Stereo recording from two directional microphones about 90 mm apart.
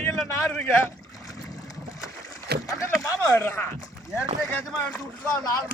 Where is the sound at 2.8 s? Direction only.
40° left (ahead or behind); by 5.0 s 20° left (ahead or behind).